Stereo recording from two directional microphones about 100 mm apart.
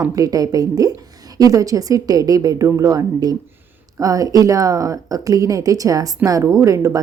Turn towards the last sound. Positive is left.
turn(degrees=-30)  # may be behind; listen again after turning